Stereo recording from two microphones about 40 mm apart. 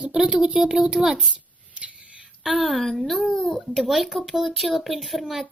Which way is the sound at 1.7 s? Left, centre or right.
Right.